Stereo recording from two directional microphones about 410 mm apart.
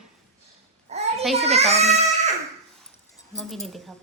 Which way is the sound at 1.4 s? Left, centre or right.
Centre.